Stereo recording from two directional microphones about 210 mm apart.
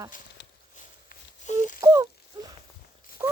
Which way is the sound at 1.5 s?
35° left (ahead or behind).